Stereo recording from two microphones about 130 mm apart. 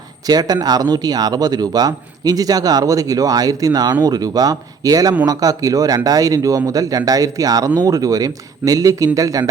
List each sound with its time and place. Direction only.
0.3 s speech: 30° right (ahead or behind)